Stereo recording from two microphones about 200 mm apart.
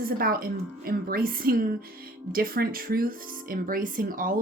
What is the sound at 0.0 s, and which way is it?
Speech, 45° right (ahead or behind).